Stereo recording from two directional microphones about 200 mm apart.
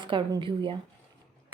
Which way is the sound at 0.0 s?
25° right (ahead or behind).